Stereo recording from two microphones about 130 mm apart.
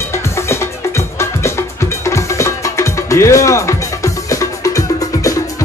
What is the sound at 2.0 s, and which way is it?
Music, 20° left (ahead or behind).